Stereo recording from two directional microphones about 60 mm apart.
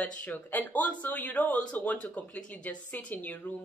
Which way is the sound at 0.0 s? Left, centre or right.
Left.